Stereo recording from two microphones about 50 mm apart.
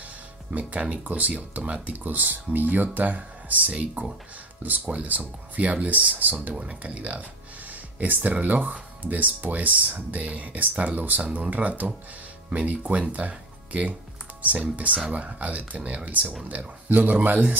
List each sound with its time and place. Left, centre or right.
0.5 s speech: right
6.5 s speech: right
15.0 s speech: right